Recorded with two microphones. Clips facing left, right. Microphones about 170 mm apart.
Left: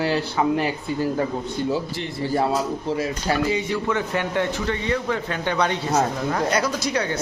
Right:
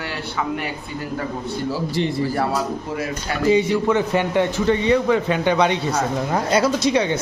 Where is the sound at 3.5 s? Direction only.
20° right (ahead or behind).